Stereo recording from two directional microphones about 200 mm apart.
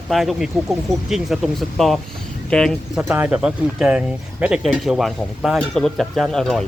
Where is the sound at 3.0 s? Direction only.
10° right (ahead or behind).